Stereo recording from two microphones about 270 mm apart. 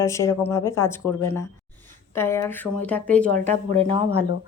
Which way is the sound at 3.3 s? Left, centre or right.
Right.